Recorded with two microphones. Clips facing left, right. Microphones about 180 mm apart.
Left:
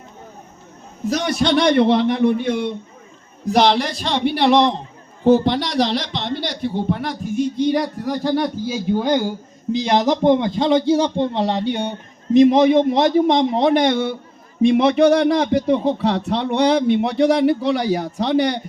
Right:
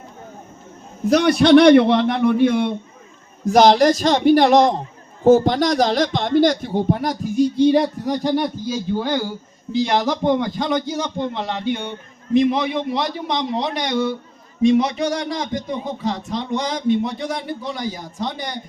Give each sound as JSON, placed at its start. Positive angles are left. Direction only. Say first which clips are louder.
{"t": 1.1, "sound": "a man's voice", "louder": "right 7 dB", "side_deg": -60}
{"t": 3.4, "sound": "speech", "louder": "right 4 dB", "side_deg": -45}
{"t": 8.6, "sound": "a man's voice", "louder": "left 3 dB", "side_deg": 15}